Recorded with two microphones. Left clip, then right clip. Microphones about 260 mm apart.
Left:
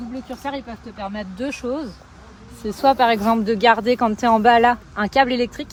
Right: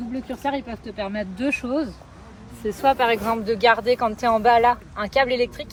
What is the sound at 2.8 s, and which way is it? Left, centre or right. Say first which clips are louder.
Speech: left 3 dB; left.